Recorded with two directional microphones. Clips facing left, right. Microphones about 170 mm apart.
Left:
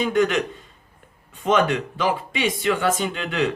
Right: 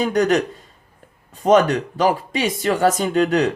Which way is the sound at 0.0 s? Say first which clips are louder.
Right 3 dB; 40° right (ahead or behind).